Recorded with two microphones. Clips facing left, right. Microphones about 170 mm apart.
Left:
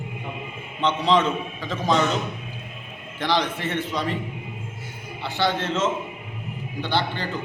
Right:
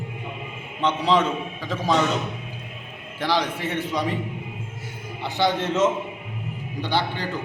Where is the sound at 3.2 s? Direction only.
10° right (ahead or behind).